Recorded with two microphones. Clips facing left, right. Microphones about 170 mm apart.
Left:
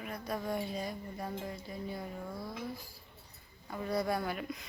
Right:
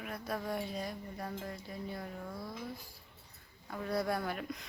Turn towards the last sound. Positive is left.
turn(degrees=0)  # may be behind; listen again after turning